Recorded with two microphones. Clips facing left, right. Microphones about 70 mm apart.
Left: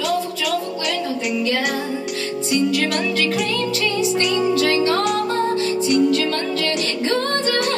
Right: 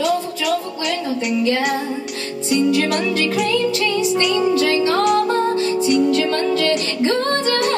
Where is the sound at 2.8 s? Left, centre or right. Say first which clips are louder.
Right 2 dB; centre.